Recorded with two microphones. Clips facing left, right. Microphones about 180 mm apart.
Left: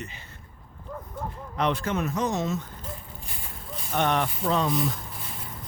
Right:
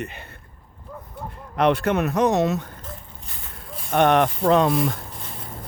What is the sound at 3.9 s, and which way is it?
Speech, 60° right (ahead or behind).